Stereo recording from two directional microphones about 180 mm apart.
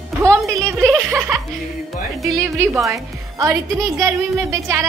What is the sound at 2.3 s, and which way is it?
A woman's voice, 15° right (ahead or behind).